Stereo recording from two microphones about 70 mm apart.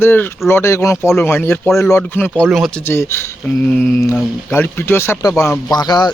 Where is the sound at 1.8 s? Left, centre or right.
Left.